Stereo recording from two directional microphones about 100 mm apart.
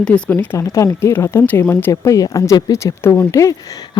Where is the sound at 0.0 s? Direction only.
10° left (ahead or behind).